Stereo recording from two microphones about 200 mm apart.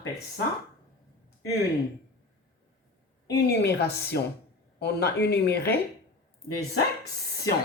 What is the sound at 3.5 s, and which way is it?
Speech, 55° left (ahead or behind).